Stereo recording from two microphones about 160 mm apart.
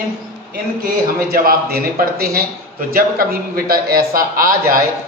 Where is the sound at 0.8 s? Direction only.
65° right (ahead or behind).